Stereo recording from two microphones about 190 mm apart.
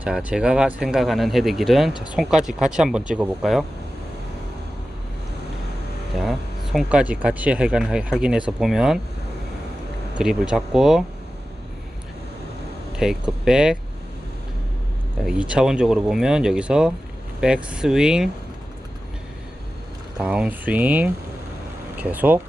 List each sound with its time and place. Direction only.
0.0 s speech: 5° right (ahead or behind)
1.9 s speech: 25° left (ahead or behind)
2.1 s speech: centre (ahead or behind)
6.1 s speech: centre (ahead or behind)
10.2 s speech: 5° right (ahead or behind)
13.0 s speech: 5° right (ahead or behind)
15.2 s speech: 5° right (ahead or behind)
20.1 s speech: 5° right (ahead or behind)